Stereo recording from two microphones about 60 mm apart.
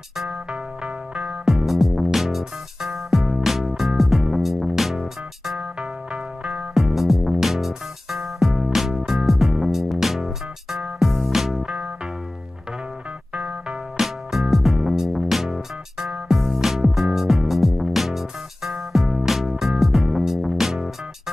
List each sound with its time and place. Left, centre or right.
0.3 s music: centre
1.5 s music: centre
5.6 s music: centre
11.6 s music: centre
13.3 s music: centre
13.9 s music: centre